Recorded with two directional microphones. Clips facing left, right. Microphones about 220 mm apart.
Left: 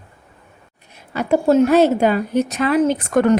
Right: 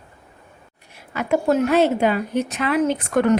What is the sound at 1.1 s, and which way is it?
Speech, 35° left (ahead or behind).